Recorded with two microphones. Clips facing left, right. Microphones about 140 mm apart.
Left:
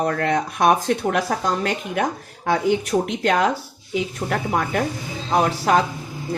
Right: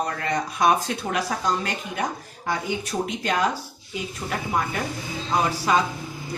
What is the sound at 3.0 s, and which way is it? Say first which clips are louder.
Speech: left 5 dB; 65° left (ahead or behind).